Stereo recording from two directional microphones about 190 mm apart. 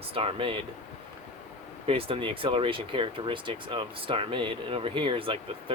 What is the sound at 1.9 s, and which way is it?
Speech, 30° right (ahead or behind).